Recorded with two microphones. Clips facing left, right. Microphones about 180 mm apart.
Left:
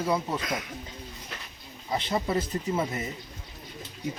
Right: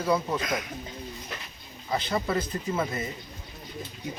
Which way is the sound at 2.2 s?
25° left (ahead or behind).